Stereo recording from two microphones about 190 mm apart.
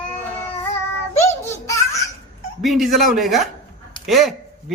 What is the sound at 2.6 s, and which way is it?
Speech, centre (ahead or behind).